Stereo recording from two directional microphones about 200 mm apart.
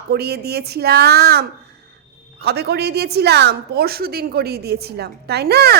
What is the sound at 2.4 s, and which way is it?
A woman's voice, 55° right (ahead or behind).